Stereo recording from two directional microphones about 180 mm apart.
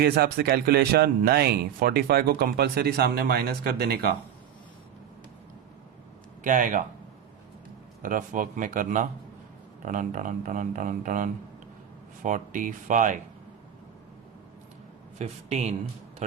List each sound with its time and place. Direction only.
0.0 s speech: 60° right (ahead or behind)
6.4 s speech: 45° right (ahead or behind)
8.0 s speech: 50° right (ahead or behind)
15.2 s speech: 40° right (ahead or behind)